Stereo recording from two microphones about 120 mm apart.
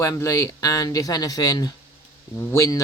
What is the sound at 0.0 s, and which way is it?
Speech, 25° left (ahead or behind).